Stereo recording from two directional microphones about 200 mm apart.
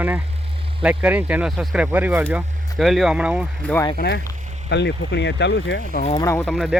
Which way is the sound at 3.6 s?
5° left (ahead or behind).